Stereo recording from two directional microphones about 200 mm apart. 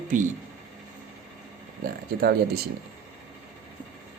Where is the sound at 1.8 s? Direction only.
50° right (ahead or behind).